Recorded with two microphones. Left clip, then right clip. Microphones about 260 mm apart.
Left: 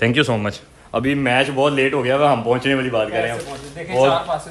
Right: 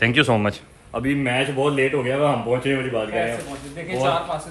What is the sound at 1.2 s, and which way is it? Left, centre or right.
Speech, centre.